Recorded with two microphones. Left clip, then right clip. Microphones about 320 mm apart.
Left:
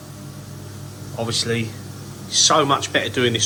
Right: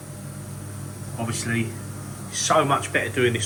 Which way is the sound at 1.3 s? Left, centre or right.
Centre.